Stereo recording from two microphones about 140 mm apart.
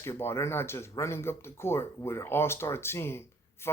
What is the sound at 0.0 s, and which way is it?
Speech, 20° left (ahead or behind).